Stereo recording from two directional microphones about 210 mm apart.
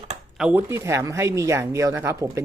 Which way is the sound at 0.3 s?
5° right (ahead or behind).